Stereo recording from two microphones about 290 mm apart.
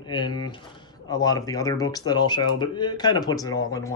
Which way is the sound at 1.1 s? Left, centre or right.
Centre.